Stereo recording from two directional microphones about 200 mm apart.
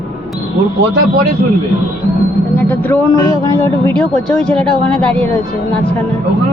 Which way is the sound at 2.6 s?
10° left (ahead or behind).